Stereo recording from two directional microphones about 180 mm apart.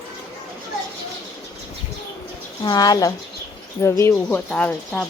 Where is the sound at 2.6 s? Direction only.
20° left (ahead or behind).